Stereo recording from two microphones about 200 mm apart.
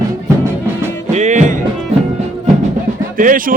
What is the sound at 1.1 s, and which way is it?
Music, 35° right (ahead or behind).